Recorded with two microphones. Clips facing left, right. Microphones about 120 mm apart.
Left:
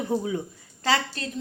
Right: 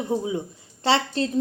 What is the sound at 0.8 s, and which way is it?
Speech, 30° right (ahead or behind).